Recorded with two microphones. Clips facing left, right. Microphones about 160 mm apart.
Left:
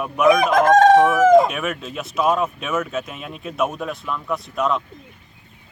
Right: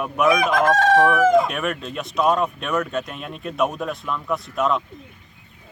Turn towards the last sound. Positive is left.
turn(degrees=0)  # may be behind; listen again after turning